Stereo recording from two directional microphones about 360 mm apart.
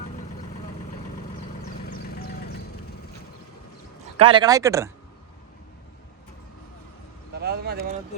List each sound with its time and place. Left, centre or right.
2.1 s vehicle: left
4.2 s speech: centre
7.3 s speech: right